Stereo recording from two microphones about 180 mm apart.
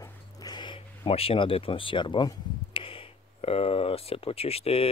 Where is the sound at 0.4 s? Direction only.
25° left (ahead or behind).